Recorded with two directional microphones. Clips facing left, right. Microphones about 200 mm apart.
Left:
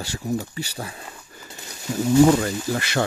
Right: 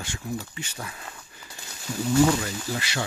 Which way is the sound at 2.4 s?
55° left (ahead or behind).